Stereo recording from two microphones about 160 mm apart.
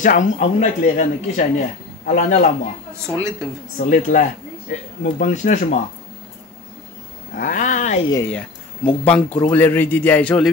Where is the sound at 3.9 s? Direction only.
55° left (ahead or behind).